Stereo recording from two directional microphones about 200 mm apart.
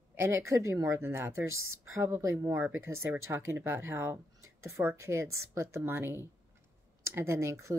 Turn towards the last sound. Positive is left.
turn(degrees=-15)  # may be behind; listen again after turning